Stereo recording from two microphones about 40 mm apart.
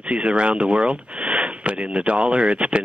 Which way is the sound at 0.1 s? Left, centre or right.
Right.